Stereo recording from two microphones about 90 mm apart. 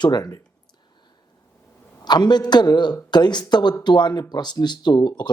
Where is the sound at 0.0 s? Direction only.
50° left (ahead or behind).